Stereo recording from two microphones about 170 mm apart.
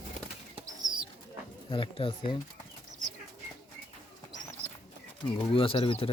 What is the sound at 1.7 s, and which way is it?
Speech, 30° left (ahead or behind).